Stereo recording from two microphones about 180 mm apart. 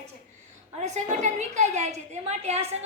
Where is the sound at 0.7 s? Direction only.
40° right (ahead or behind).